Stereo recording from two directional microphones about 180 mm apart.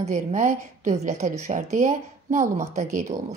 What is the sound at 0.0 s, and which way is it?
A woman's voice, 40° right (ahead or behind).